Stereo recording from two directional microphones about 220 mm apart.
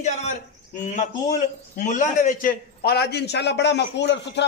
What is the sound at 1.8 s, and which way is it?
A man's voice, 35° left (ahead or behind).